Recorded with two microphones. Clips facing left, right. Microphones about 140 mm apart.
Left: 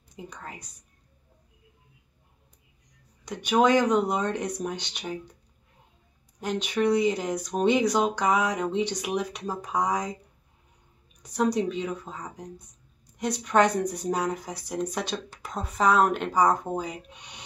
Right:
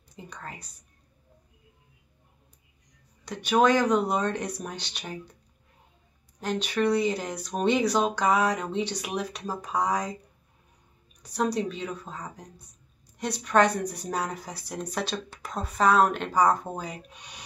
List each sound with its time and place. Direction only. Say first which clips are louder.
0.1 s a sound: left 1 dB; 15° left (ahead or behind)
3.3 s speech: even; 15° left (ahead or behind)
6.4 s speech: left 1 dB; 20° left (ahead or behind)
11.2 s speech: left 2 dB; 20° left (ahead or behind)